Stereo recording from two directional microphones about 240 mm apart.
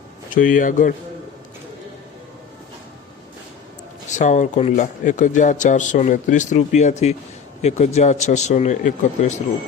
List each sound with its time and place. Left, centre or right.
0.3 s speech: left
4.1 s a man's voice: left